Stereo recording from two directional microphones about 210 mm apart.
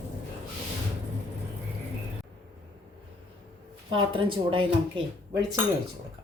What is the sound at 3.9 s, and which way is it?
Speech, 25° right (ahead or behind).